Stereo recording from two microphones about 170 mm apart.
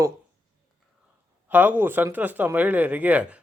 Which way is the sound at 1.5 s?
10° right (ahead or behind).